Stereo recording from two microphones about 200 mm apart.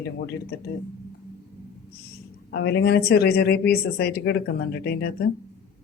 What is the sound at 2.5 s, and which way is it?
Speech, 55° left (ahead or behind).